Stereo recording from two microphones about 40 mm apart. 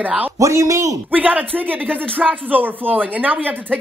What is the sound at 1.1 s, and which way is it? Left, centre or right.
Speech, right.